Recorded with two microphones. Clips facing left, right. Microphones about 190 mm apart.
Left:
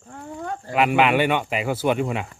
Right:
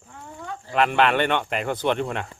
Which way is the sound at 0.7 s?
10° left (ahead or behind).